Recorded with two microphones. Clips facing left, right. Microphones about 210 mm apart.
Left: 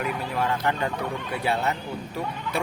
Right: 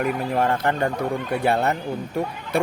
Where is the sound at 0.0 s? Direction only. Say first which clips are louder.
Right 5 dB; 50° right (ahead or behind).